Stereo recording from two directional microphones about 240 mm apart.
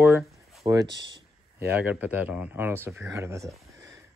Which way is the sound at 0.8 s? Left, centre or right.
Right.